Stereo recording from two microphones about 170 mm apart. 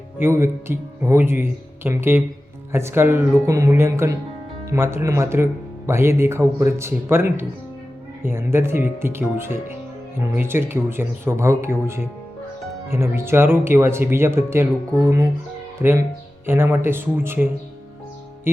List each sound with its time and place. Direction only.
0.2 s speech: 15° right (ahead or behind)
15.8 s speech: 15° right (ahead or behind)